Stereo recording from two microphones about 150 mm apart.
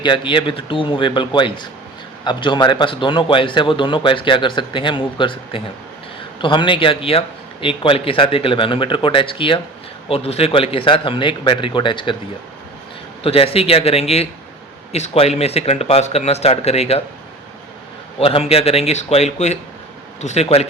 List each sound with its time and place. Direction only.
0.0 s a man's voice: 30° left (ahead or behind)
13.2 s a man's voice: 40° left (ahead or behind)
18.2 s speech: 40° left (ahead or behind)